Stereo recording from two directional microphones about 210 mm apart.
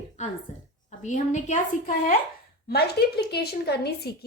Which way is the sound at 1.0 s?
35° left (ahead or behind).